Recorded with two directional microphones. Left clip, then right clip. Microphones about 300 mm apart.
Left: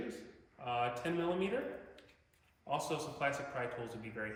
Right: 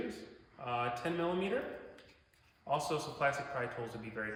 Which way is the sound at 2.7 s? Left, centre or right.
Centre.